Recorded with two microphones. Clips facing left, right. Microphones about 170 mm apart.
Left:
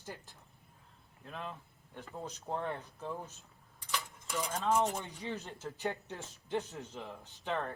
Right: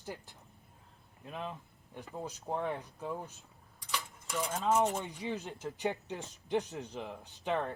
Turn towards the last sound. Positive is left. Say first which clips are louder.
# right 3 dB
turn(degrees=-15)  # may be behind; listen again after turning